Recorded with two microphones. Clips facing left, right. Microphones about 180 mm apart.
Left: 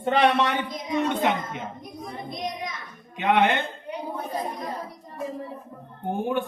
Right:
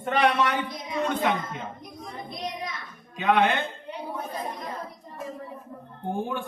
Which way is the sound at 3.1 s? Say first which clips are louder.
Left 1 dB; 20° left (ahead or behind).